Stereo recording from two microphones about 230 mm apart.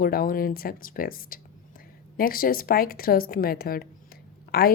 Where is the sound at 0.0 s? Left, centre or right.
Left.